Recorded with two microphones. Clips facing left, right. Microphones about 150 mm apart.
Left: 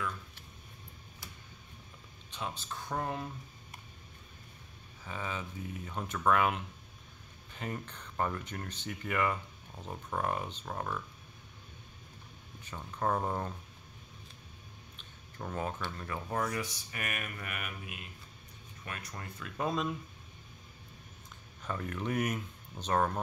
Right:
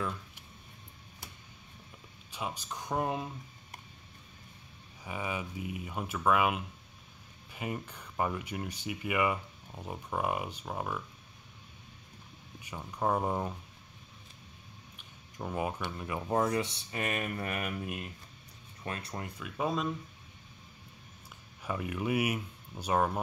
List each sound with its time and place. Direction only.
2.3 s speech: 10° right (ahead or behind)
5.0 s speech: 15° right (ahead or behind)
12.6 s speech: 10° right (ahead or behind)
15.0 s speech: 10° right (ahead or behind); by 18.0 s 40° right (ahead or behind)
18.9 s speech: 25° right (ahead or behind)
19.2 s speech: 10° right (ahead or behind)
21.6 s speech: 10° right (ahead or behind)